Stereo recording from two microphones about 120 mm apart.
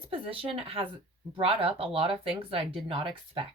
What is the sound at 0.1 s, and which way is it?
A woman's voice, 50° right (ahead or behind).